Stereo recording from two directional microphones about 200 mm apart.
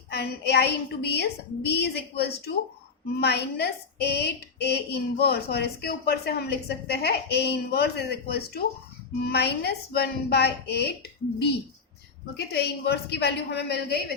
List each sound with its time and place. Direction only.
0.1 s a woman's voice: 55° left (ahead or behind)
12.5 s a woman's voice: 55° left (ahead or behind)